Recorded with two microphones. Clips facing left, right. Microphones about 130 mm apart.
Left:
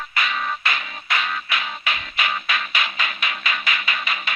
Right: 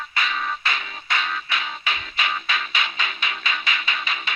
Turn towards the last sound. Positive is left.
turn(degrees=-30)  # may be behind; listen again after turning